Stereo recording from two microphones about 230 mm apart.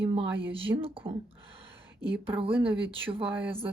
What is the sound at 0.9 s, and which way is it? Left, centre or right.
Speech, right.